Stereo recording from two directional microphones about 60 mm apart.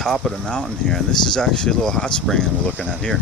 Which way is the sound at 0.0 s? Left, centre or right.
Centre.